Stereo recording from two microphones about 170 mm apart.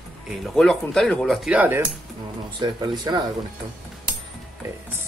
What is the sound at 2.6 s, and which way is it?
Speech, 25° right (ahead or behind).